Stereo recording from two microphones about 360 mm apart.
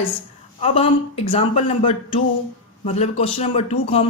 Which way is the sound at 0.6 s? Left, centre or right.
Centre.